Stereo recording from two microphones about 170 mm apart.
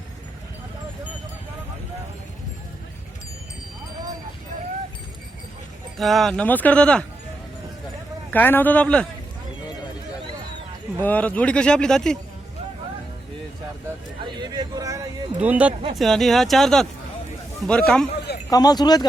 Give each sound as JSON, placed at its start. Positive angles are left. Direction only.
{"t": 6.0, "sound": "speech", "side_deg": 0}
{"t": 8.3, "sound": "speech", "side_deg": 10}
{"t": 11.0, "sound": "speech", "side_deg": 10}
{"t": 14.3, "sound": "speech", "side_deg": -25}
{"t": 15.4, "sound": "speech", "side_deg": -10}
{"t": 18.5, "sound": "speech", "side_deg": 25}